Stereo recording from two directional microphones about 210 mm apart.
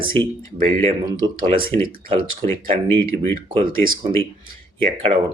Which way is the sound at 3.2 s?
25° right (ahead or behind).